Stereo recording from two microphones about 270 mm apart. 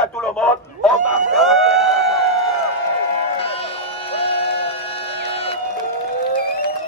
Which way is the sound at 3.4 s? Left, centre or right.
Left.